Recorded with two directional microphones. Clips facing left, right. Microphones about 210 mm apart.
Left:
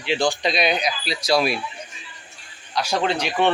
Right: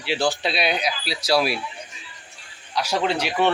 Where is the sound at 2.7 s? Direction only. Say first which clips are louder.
Left 1 dB; 10° right (ahead or behind).